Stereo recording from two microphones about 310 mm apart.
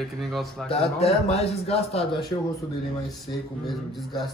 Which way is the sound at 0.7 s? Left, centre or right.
Centre.